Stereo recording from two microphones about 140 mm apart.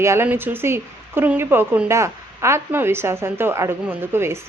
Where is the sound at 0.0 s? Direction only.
20° right (ahead or behind).